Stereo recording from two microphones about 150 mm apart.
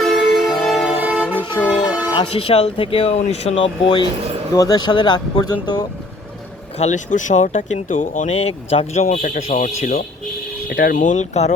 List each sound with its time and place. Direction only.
0.0 s music: centre (ahead or behind)
0.9 s music: 10° right (ahead or behind)
1.6 s vehicle: 10° right (ahead or behind)
2.3 s speech: 40° left (ahead or behind)
4.5 s speech: 25° left (ahead or behind)
6.7 s speech: 50° left (ahead or behind)
8.3 s speech: 40° left (ahead or behind)
9.1 s speech: 65° left (ahead or behind)
9.5 s speech: 50° left (ahead or behind)
10.7 s speech: 80° left
11.1 s speech: 50° left (ahead or behind)